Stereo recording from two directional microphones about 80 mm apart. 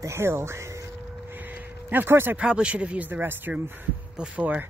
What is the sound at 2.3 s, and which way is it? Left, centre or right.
Speech, centre.